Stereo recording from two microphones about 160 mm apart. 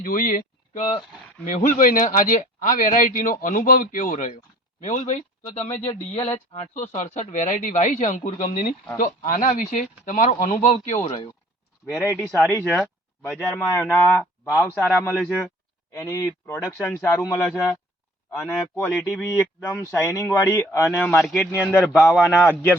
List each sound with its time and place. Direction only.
0.0 s speech: 60° left (ahead or behind)
4.8 s speech: 45° left (ahead or behind)
10.9 s speech: 20° left (ahead or behind)
12.2 s speech: 10° left (ahead or behind)
21.8 s a man's voice: 5° right (ahead or behind)